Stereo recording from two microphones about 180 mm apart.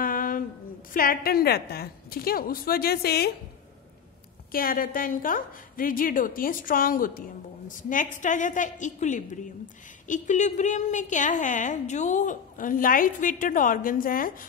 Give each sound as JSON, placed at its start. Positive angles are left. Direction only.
{"t": 0.0, "sound": "a sound", "side_deg": 50}
{"t": 0.9, "sound": "a woman's voice", "side_deg": 55}
{"t": 4.5, "sound": "a woman's voice", "side_deg": 55}